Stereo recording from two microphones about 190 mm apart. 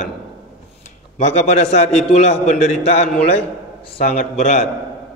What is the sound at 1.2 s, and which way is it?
A man's voice, 35° left (ahead or behind).